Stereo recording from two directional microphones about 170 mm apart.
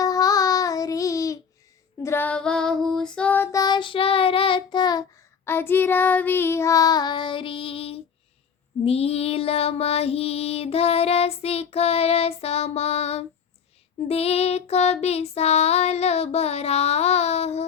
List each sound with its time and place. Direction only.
0.0 s child singing: 20° left (ahead or behind)
5.5 s child singing: 15° left (ahead or behind); by 8.0 s 35° left (ahead or behind)
8.8 s female singing: 35° left (ahead or behind)